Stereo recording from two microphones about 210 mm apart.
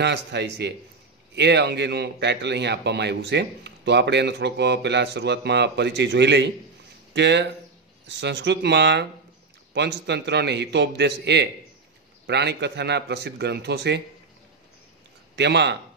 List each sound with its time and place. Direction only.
0.0 s a man's voice: 55° right (ahead or behind)
15.3 s a man's voice: 55° right (ahead or behind)